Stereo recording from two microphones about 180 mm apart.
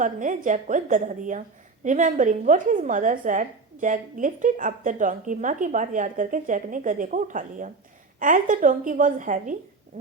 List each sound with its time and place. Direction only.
0.0 s a woman's voice: 45° right (ahead or behind)